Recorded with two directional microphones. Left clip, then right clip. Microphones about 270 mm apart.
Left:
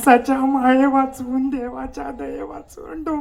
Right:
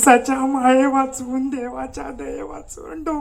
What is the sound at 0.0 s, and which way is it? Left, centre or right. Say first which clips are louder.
A woman's voice: even; right.